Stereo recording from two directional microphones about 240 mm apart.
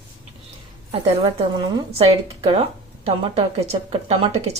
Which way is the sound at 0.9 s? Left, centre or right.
Centre.